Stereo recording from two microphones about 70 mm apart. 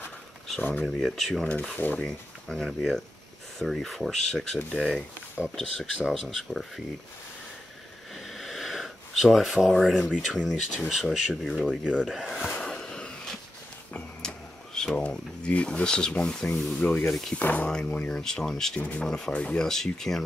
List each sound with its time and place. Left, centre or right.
0.6 s speech: left
0.9 s speech: centre
1.8 s speech: left
2.0 s speech: centre
8.1 s sniff: centre
10.1 s speech: centre
12.6 s a sound: centre
14.2 s speech: centre; by 17.6 s left
17.6 s speech: centre
18.8 s speech: left
19.0 s speech: centre